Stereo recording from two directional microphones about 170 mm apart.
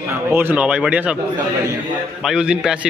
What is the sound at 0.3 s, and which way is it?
Speech, 10° right (ahead or behind).